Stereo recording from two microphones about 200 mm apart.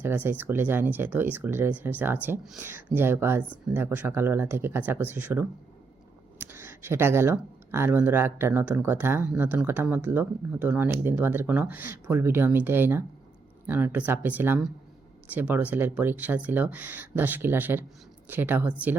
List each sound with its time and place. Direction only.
0.0 s speech: 10° right (ahead or behind)
6.5 s speech: 10° right (ahead or behind)